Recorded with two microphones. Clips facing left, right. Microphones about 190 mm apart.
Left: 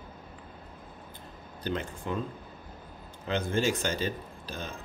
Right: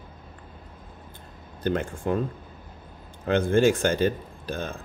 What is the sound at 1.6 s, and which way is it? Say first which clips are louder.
Speech: right 7 dB; 50° right (ahead or behind).